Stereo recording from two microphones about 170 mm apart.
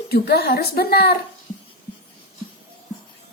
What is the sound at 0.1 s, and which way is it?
A woman's voice, 65° left (ahead or behind).